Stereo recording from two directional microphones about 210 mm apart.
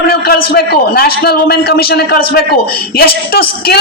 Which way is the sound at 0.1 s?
45° left (ahead or behind).